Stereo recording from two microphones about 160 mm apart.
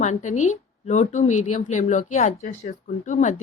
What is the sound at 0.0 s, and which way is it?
A woman's voice, 50° left (ahead or behind).